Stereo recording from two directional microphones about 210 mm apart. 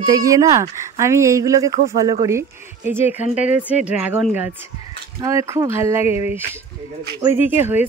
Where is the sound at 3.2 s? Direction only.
35° left (ahead or behind).